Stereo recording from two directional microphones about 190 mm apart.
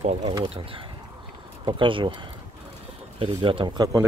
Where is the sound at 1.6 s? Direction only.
25° right (ahead or behind).